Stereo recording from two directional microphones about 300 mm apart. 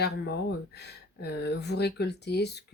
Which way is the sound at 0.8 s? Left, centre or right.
Left.